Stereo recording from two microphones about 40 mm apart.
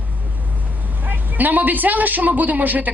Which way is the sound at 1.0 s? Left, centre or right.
Right.